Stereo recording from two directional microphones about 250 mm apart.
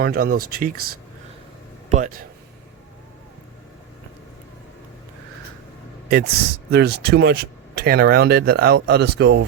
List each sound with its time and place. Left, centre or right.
0.0 s speech: right
1.9 s speech: right
6.1 s speech: right